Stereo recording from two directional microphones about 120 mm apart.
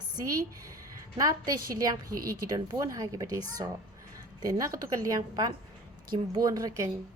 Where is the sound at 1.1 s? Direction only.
30° right (ahead or behind).